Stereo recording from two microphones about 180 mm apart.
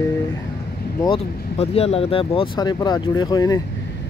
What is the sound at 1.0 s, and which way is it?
Speech, 30° left (ahead or behind).